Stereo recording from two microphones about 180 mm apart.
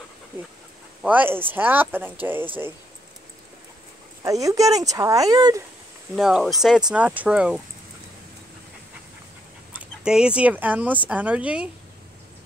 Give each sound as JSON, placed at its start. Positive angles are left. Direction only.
{"t": 1.0, "sound": "speech", "side_deg": -10}
{"t": 4.2, "sound": "speech", "side_deg": -20}
{"t": 6.1, "sound": "speech", "side_deg": -5}
{"t": 9.7, "sound": "speech", "side_deg": -5}